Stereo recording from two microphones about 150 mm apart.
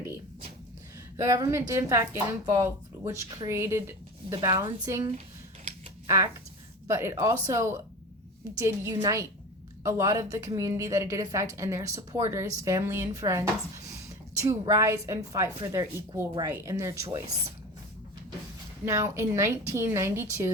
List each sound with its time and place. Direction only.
1.1 s a woman's voice: 20° right (ahead or behind)
6.1 s a woman's voice: 20° right (ahead or behind)
18.9 s a woman's voice: 20° right (ahead or behind)